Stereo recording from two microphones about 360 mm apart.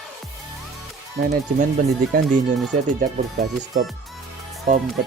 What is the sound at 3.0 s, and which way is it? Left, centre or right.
Speech, right.